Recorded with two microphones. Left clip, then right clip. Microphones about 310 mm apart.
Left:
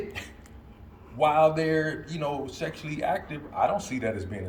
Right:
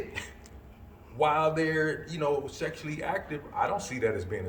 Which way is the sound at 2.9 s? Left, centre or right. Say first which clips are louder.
Left 7 dB; left.